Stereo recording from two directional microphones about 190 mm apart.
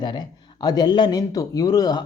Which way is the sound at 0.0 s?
25° left (ahead or behind).